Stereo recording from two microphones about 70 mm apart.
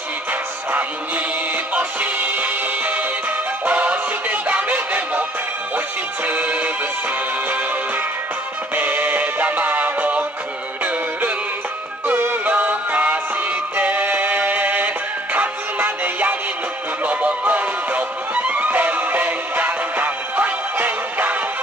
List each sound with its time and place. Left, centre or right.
0.7 s music: right
6.2 s music: right
8.7 s music: right
12.2 s music: right